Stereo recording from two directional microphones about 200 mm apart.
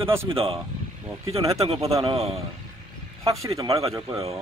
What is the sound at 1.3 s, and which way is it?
Speech, 15° right (ahead or behind).